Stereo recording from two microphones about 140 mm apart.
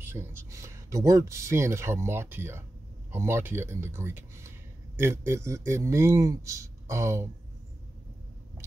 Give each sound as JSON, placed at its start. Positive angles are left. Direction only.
{"t": 0.0, "sound": "speech", "side_deg": -15}